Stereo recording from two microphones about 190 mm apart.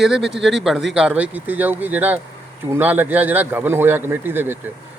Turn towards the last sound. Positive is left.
turn(degrees=-10)  # may be behind; listen again after turning